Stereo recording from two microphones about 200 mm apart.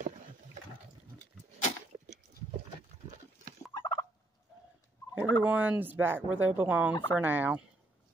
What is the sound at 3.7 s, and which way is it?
Fowl, 20° left (ahead or behind).